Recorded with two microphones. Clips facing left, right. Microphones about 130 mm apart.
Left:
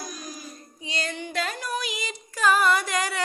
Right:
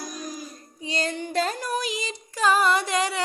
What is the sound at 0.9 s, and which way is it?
Music, 40° right (ahead or behind).